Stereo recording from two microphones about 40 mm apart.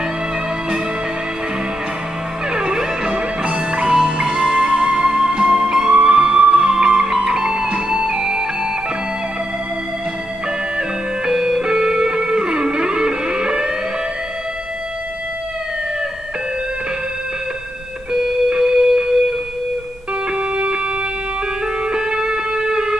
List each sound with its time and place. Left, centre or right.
2.5 s music: centre
11.2 s music: centre
18.1 s music: centre
20.3 s music: right
21.8 s music: centre